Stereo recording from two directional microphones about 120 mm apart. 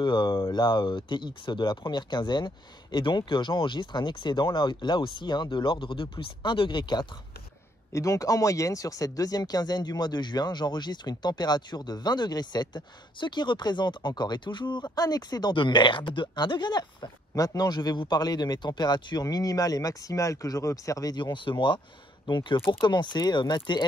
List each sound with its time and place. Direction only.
0.0 s speech: 40° left (ahead or behind)
7.9 s speech: 25° left (ahead or behind)